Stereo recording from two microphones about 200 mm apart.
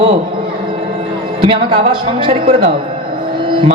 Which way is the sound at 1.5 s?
25° right (ahead or behind).